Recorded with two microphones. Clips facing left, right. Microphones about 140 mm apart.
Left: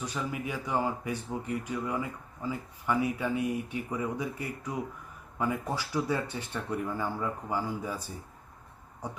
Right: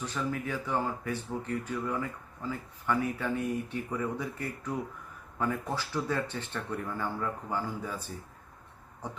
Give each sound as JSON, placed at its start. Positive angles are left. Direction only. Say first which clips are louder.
{"t": 0.0, "sound": "speech", "louder": "right 1 dB", "side_deg": 10}
{"t": 9.0, "sound": "speech", "louder": "left 1 dB", "side_deg": 10}